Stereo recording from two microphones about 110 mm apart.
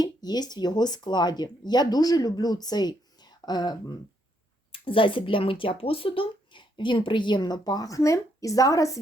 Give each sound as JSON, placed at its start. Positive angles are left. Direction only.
{"t": 0.0, "sound": "speech", "side_deg": 40}
{"t": 4.7, "sound": "speech", "side_deg": 55}